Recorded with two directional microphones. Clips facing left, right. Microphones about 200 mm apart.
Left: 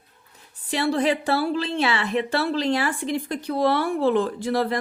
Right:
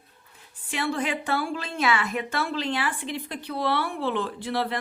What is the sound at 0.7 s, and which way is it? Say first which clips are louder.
A woman's voice: left 6 dB; 35° left (ahead or behind).